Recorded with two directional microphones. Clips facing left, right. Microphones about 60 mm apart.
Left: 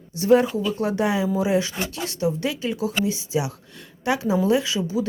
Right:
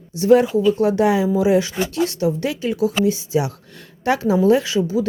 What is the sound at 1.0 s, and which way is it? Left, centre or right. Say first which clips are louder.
Speech: right 4 dB; right.